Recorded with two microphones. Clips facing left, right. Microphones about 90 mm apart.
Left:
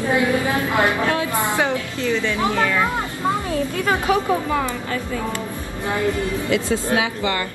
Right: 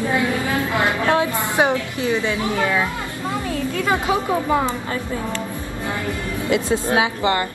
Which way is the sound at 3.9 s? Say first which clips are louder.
Left 1 dB; 20° right (ahead or behind).